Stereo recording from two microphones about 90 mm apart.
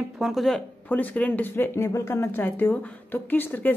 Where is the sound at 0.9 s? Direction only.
15° left (ahead or behind).